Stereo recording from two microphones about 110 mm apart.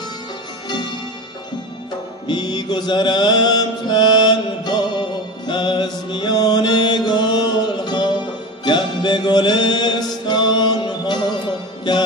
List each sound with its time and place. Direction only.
2.2 s mantra: 40° left (ahead or behind)
8.6 s music: 45° left (ahead or behind)